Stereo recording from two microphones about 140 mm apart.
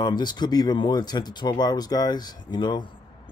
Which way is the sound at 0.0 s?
30° left (ahead or behind).